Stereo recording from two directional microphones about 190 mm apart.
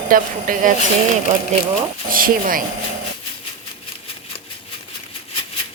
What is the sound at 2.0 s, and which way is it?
Speech, 50° right (ahead or behind).